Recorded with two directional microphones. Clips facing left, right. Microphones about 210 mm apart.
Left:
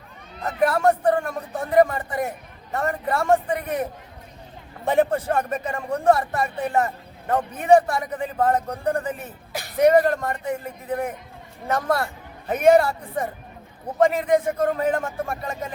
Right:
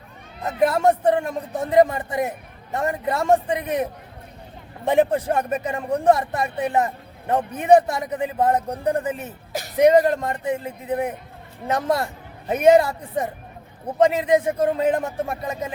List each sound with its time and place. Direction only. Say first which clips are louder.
0.4 s a man's voice: right 1 dB; 20° right (ahead or behind)
4.9 s a man's voice: right 2 dB; 15° right (ahead or behind)
9.5 s music: right 3 dB; 45° right (ahead or behind)
9.7 s a man's voice: right 1 dB; 20° right (ahead or behind)